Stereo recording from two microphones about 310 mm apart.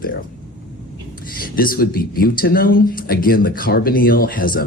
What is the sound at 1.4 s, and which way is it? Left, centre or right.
Speech, left.